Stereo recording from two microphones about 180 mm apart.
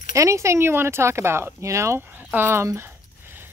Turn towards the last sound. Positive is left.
turn(degrees=-15)  # may be behind; listen again after turning